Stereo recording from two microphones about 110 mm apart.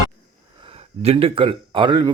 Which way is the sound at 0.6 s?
65° right (ahead or behind).